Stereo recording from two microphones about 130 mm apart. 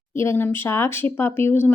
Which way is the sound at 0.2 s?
15° left (ahead or behind).